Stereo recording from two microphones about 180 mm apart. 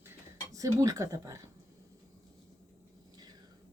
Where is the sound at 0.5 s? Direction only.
20° right (ahead or behind).